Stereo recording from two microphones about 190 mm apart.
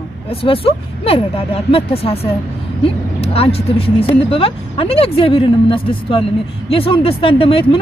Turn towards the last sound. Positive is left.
turn(degrees=30)  # may be behind; listen again after turning